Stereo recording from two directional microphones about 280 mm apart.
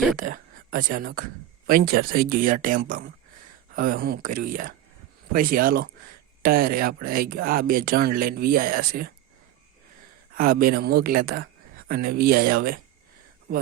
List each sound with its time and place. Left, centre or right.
0.2 s speech: right
10.3 s speech: right